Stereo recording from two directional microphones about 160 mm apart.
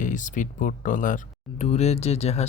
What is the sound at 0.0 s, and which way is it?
Speech, 50° left (ahead or behind).